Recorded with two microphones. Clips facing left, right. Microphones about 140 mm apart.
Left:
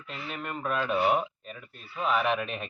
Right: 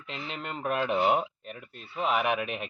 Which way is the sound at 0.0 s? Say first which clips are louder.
Even; 20° right (ahead or behind).